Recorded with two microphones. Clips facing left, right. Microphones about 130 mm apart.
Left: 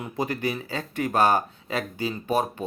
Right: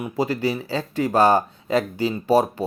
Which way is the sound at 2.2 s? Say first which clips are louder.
Right 7 dB; 35° right (ahead or behind).